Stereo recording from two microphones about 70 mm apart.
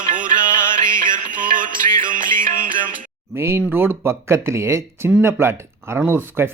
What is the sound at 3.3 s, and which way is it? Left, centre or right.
Speech, right.